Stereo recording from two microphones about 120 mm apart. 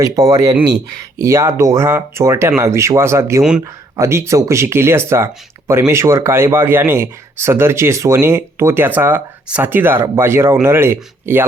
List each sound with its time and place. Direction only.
0.0 s speech: 30° right (ahead or behind)